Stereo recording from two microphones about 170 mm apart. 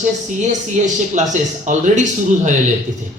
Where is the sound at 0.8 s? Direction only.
45° right (ahead or behind).